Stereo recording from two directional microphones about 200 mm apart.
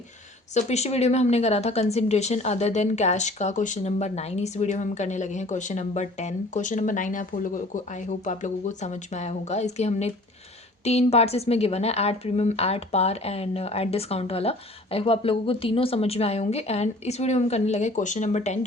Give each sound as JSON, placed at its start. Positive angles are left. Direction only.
{"t": 0.5, "sound": "a woman's voice", "side_deg": 35}